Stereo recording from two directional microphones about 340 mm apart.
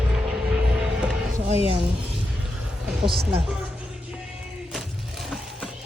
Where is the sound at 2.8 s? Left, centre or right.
Centre.